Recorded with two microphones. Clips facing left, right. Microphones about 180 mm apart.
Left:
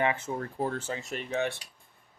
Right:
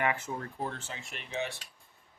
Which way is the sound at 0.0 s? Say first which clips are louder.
Left 3 dB; 25° left (ahead or behind).